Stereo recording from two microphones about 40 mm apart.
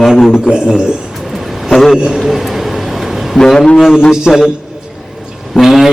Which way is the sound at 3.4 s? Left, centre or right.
Centre.